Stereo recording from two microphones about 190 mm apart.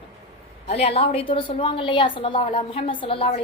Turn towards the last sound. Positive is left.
turn(degrees=30)  # may be behind; listen again after turning